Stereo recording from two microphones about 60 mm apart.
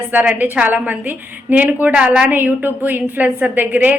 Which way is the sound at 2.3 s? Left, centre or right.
Right.